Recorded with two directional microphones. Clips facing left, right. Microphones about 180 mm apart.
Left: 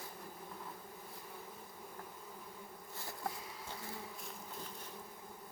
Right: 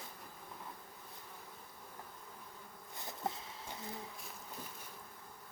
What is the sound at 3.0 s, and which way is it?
Insect, 20° right (ahead or behind).